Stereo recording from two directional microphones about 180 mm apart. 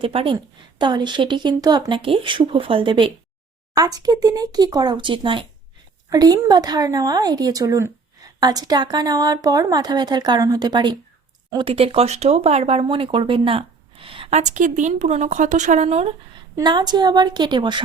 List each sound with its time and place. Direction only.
0.0 s speech: 30° right (ahead or behind)
16.6 s speech: 25° right (ahead or behind)